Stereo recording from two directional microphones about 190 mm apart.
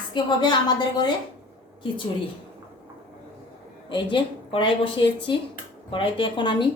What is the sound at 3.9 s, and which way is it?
A woman's voice, 25° left (ahead or behind).